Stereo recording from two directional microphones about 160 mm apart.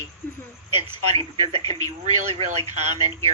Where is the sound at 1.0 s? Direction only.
40° right (ahead or behind).